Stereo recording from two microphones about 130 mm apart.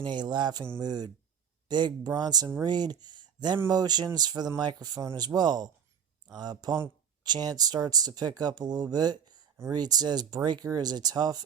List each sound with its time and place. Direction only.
0.0 s speech: 35° right (ahead or behind)